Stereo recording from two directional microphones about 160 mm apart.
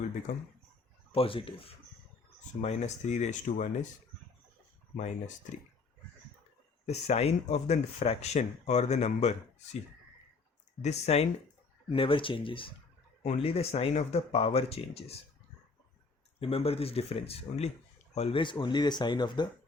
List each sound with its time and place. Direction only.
1.1 s speech: 35° left (ahead or behind)
2.5 s speech: 45° left (ahead or behind)
4.9 s speech: 50° left (ahead or behind)
6.8 s speech: 45° left (ahead or behind)
10.8 s speech: 40° left (ahead or behind)
16.4 s speech: 40° left (ahead or behind)